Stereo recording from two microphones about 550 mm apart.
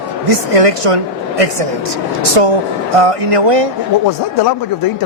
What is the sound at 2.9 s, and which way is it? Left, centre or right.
Speech, right.